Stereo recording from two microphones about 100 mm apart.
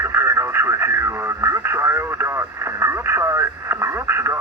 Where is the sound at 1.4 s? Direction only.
25° right (ahead or behind).